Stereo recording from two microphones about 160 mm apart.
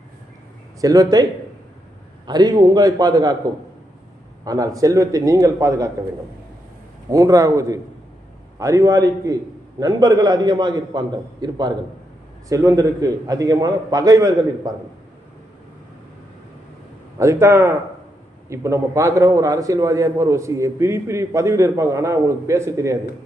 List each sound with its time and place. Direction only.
0.8 s a man's voice: 25° right (ahead or behind)
4.4 s a man's voice: 20° right (ahead or behind)
7.1 s a man's voice: 20° right (ahead or behind)
17.2 s a man's voice: 20° right (ahead or behind)